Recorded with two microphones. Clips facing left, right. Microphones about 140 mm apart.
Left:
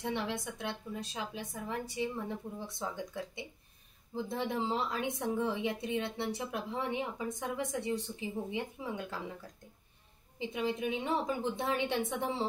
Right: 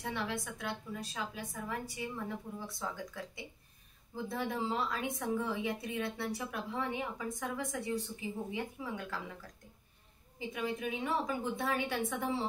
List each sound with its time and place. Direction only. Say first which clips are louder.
0.0 s a woman's voice: left 2 dB; 25° left (ahead or behind)
10.5 s a woman's voice: left 3 dB; 25° left (ahead or behind)